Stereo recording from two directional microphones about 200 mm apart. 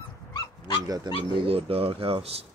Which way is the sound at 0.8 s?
20° right (ahead or behind).